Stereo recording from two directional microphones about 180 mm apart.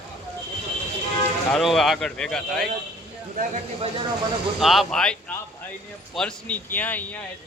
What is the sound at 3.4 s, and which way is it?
Speech, 40° right (ahead or behind).